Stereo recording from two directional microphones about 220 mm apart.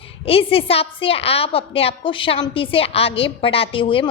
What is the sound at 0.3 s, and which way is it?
A woman's voice, 25° left (ahead or behind).